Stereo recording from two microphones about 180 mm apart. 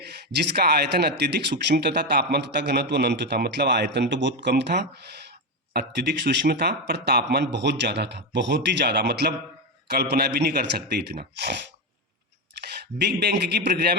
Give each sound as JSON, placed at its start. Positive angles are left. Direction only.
{"t": 0.0, "sound": "speech", "side_deg": -65}
{"t": 12.6, "sound": "speech", "side_deg": -65}